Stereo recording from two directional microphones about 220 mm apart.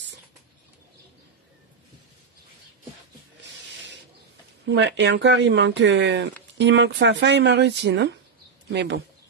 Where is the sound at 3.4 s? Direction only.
55° right (ahead or behind).